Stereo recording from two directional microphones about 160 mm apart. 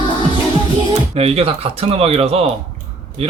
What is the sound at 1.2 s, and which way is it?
A man's voice, 40° right (ahead or behind).